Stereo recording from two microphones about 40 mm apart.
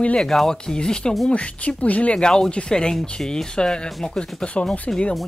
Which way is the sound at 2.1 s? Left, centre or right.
Centre.